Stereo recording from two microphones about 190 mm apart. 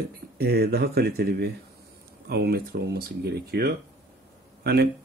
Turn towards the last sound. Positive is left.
turn(degrees=-55)  # may be behind; listen again after turning